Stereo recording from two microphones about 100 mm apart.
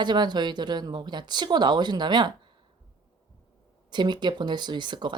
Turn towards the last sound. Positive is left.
turn(degrees=-50)  # may be behind; listen again after turning